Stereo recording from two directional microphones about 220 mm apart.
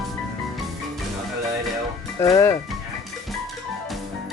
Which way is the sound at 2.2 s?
15° left (ahead or behind).